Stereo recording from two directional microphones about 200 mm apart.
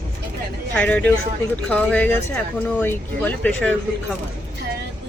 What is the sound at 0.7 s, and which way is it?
Speech, 5° left (ahead or behind).